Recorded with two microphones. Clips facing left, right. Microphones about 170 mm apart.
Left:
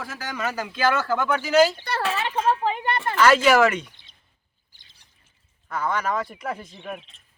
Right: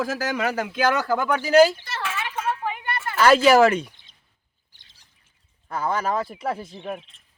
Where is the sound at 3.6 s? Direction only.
30° right (ahead or behind).